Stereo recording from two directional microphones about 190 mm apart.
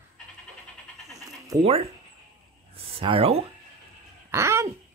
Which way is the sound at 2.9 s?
30° right (ahead or behind).